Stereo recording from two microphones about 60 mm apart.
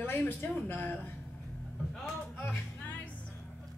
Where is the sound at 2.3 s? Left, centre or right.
Left.